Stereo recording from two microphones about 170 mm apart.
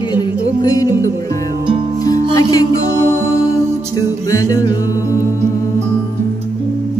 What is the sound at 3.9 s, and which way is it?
Music, 20° left (ahead or behind).